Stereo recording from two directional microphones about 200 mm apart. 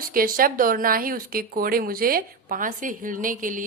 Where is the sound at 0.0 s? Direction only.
45° right (ahead or behind).